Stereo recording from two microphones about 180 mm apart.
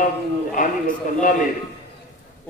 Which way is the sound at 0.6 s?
45° left (ahead or behind).